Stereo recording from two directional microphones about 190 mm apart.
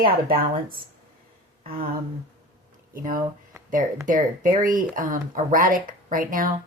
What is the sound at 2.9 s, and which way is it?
Speech, 45° right (ahead or behind).